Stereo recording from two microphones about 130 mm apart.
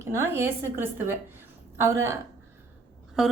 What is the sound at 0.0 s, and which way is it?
A woman's voice, 20° right (ahead or behind).